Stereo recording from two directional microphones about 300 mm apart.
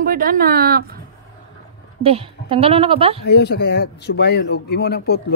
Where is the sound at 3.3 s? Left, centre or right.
Left.